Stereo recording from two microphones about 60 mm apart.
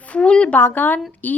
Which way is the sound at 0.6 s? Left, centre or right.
Left.